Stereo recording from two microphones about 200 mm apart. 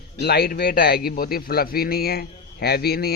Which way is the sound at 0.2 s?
55° left (ahead or behind).